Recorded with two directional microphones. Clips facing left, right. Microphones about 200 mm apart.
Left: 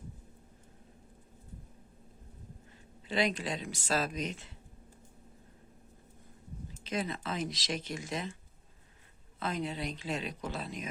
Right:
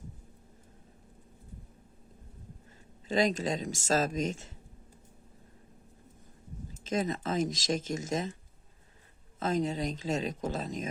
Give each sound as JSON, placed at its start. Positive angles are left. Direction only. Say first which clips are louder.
{"t": 3.1, "sound": "speech", "louder": "right 4 dB", "side_deg": -45}
{"t": 6.8, "sound": "speech", "louder": "right 4 dB", "side_deg": -45}
{"t": 9.4, "sound": "speech", "louder": "right 5 dB", "side_deg": -45}